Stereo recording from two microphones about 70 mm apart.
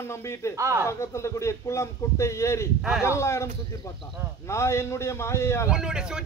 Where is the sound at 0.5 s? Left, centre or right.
Right.